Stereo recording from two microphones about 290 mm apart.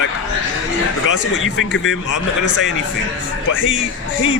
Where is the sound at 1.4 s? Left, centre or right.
Left.